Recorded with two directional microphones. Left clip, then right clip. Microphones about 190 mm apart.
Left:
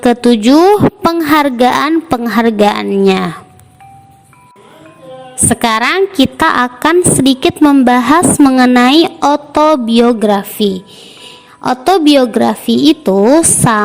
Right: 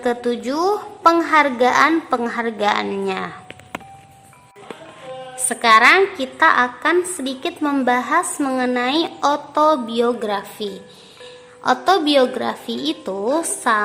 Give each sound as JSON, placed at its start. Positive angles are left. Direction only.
{"t": 0.0, "sound": "a woman's voice", "side_deg": 40}
{"t": 5.5, "sound": "a woman's voice", "side_deg": 45}